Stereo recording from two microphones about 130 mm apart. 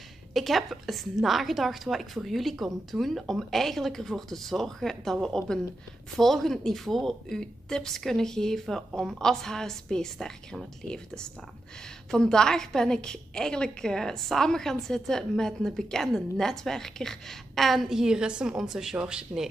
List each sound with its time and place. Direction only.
0.3 s a woman's voice: centre (ahead or behind)